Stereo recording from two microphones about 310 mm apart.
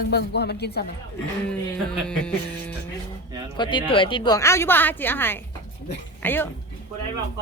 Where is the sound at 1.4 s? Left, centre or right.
Centre.